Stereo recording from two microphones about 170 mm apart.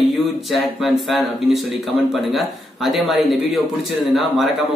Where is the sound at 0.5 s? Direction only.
Centre (ahead or behind).